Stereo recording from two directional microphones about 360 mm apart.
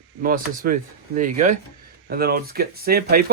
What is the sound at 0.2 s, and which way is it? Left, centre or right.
Speech, right.